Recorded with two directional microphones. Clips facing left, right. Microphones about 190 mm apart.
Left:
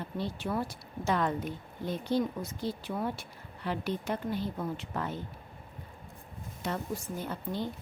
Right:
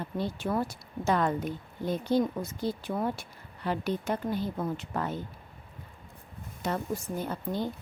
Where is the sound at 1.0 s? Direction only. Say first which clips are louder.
Right 3 dB; 45° right (ahead or behind).